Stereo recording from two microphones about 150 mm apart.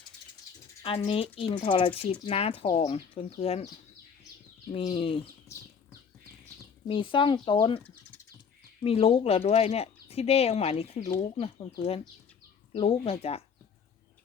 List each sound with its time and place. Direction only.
0.8 s speech: 40° left (ahead or behind)
4.7 s speech: 40° left (ahead or behind)
6.8 s speech: 35° left (ahead or behind)
8.8 s speech: 40° left (ahead or behind)